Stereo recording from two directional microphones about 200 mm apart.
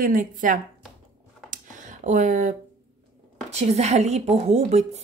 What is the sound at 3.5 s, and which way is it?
A woman's voice, 35° right (ahead or behind).